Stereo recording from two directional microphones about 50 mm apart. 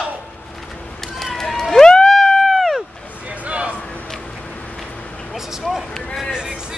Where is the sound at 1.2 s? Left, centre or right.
Centre.